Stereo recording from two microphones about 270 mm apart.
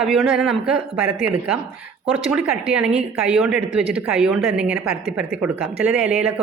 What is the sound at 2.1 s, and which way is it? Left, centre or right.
A woman's voice, centre.